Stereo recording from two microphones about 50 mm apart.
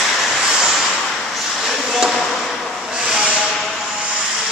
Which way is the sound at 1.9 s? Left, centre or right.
Centre.